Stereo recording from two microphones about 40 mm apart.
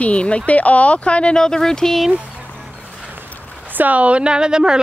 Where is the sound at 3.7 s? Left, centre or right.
Right.